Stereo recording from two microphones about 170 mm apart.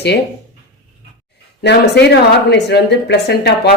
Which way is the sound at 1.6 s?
80° left.